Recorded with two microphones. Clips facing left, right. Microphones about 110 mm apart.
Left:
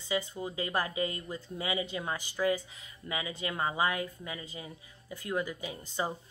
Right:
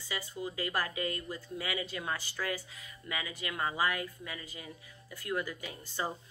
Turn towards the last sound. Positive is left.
turn(degrees=15)  # may be behind; listen again after turning